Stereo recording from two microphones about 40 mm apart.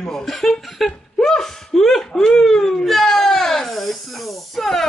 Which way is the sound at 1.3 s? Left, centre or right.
Centre.